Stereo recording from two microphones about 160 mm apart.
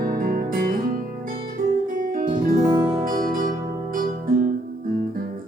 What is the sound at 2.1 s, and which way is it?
Music, 60° right (ahead or behind).